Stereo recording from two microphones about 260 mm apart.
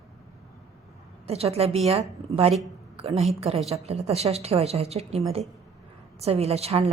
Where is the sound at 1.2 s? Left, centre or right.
Right.